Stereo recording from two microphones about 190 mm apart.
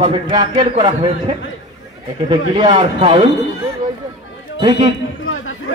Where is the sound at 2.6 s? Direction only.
25° right (ahead or behind).